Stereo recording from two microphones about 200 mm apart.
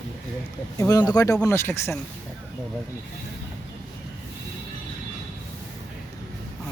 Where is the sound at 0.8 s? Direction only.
20° left (ahead or behind).